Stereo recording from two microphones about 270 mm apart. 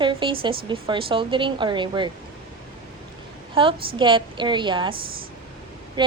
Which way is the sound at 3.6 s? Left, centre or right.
Centre.